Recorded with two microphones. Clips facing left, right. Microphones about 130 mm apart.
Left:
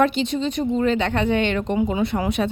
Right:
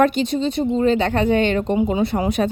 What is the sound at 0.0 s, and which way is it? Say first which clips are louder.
A woman's voice: right 2 dB; 45° right (ahead or behind).